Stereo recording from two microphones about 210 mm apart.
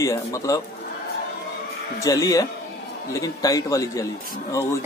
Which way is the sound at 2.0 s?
15° left (ahead or behind).